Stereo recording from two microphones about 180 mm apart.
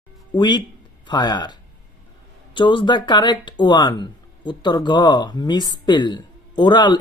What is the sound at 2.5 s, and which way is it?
Speech, 25° left (ahead or behind).